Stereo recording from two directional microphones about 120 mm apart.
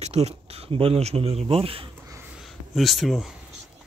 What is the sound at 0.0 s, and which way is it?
Speech, 65° right (ahead or behind).